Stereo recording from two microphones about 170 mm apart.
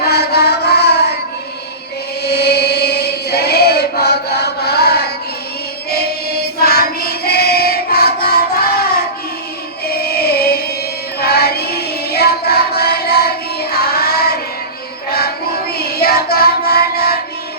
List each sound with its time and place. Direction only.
0.0 s carnatic music: 70° left (ahead or behind)
2.2 s chant: 70° left (ahead or behind)
6.6 s child singing: 65° left (ahead or behind)
9.8 s music: 65° left (ahead or behind)